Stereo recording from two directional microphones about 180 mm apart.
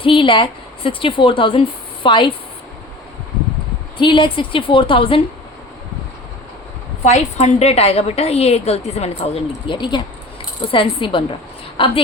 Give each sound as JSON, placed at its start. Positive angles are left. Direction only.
{"t": 0.0, "sound": "a woman's voice", "side_deg": 30}
{"t": 3.9, "sound": "a woman's voice", "side_deg": 25}
{"t": 7.0, "sound": "a woman's voice", "side_deg": 40}